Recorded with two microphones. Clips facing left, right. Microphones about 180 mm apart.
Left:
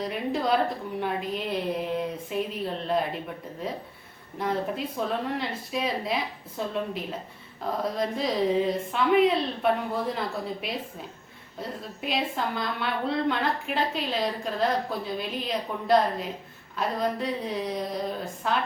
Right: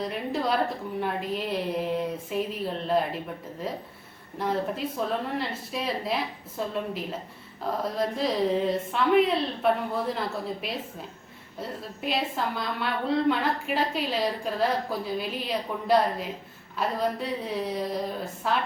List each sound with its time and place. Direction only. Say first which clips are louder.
0.0 s a woman's voice: left 1 dB; centre (ahead or behind)
4.4 s a woman's voice: even; centre (ahead or behind)
12.0 s a woman's voice: even; centre (ahead or behind)